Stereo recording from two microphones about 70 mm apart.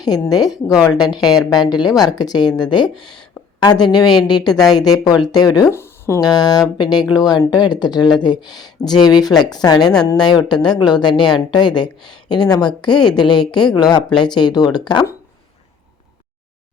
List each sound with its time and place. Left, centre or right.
0.0 s speech: left
5.7 s a sound: left
6.1 s speech: left
7.1 s speech: left
7.5 s speech: left
14.1 s speech: centre
14.3 s speech: left